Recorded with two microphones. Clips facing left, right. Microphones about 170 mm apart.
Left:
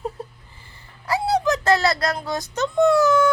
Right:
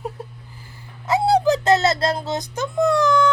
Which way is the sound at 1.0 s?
25° right (ahead or behind).